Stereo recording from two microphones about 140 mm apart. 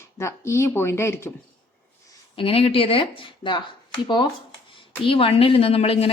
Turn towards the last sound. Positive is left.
turn(degrees=45)  # may be behind; listen again after turning